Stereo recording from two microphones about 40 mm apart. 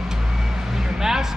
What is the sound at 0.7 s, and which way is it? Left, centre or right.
Music, centre.